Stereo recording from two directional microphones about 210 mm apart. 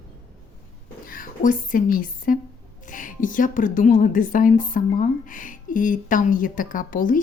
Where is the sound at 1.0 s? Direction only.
40° left (ahead or behind).